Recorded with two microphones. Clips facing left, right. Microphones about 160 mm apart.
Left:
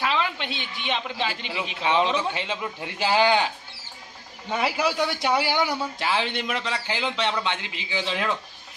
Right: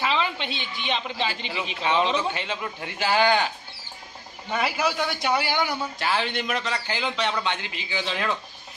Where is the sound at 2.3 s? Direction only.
20° left (ahead or behind).